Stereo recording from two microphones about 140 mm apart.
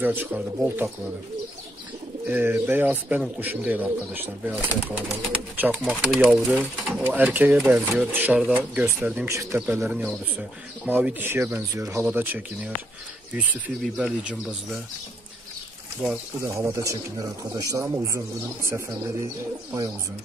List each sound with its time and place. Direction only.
0.0 s speech: 15° right (ahead or behind)
2.2 s speech: 15° right (ahead or behind)
6.0 s speech: centre (ahead or behind)
9.3 s speech: 20° right (ahead or behind)
9.6 s speech: 10° right (ahead or behind)
16.0 s speech: 5° right (ahead or behind)
16.4 s speech: 20° right (ahead or behind)